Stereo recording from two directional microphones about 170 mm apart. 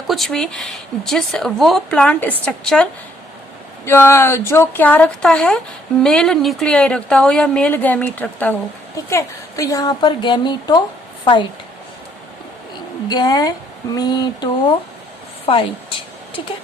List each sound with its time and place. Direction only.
0.1 s a woman's voice: centre (ahead or behind); by 10.8 s 25° left (ahead or behind)
13.1 s a woman's voice: 25° left (ahead or behind)